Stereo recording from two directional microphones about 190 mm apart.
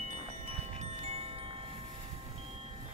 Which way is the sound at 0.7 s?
35° right (ahead or behind).